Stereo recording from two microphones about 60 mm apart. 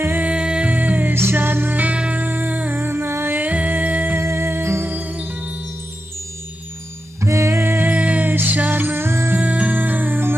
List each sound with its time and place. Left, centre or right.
0.0 s music: right
0.3 s music: centre
0.7 s music: right
1.1 s music: right
2.8 s music: right
3.4 s music: right
4.2 s music: right
7.2 s music: right
7.9 s music: right
9.4 s music: right